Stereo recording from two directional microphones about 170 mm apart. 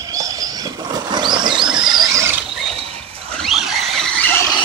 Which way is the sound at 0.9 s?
25° right (ahead or behind).